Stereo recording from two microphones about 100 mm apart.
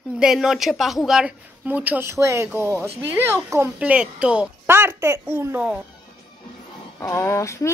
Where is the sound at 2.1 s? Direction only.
30° right (ahead or behind).